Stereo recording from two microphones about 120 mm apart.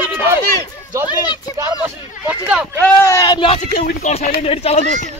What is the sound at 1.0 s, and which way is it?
Speech, 35° left (ahead or behind).